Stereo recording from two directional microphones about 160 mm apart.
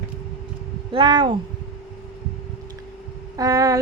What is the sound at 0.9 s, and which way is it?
Speech, 30° right (ahead or behind).